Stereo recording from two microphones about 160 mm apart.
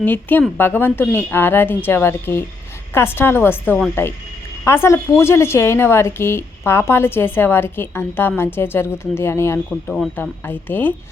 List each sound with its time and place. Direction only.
0.0 s a woman's voice: 10° left (ahead or behind)